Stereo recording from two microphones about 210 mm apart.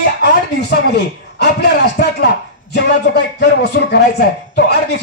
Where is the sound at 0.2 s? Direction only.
55° left (ahead or behind).